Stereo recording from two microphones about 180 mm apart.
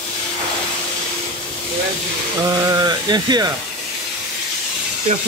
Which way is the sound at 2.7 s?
20° right (ahead or behind).